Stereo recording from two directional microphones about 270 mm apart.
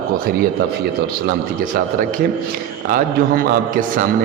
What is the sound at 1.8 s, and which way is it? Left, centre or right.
A man's voice, right.